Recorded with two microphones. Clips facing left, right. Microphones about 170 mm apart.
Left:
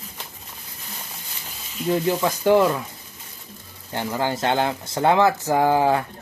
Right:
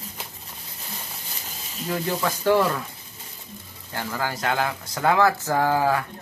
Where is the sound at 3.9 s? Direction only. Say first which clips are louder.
Left 4 dB; 25° left (ahead or behind).